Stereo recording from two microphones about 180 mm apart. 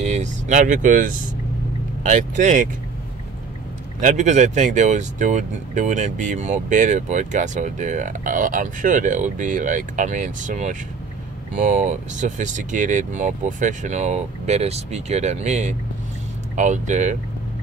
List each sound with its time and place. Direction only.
0.0 s speech: 40° right (ahead or behind)
4.0 s speech: 40° right (ahead or behind)